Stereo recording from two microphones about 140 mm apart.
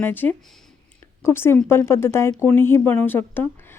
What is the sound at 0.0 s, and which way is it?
A woman's voice, 15° left (ahead or behind).